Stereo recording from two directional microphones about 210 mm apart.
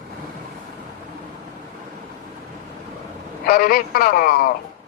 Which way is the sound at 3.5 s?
45° left (ahead or behind).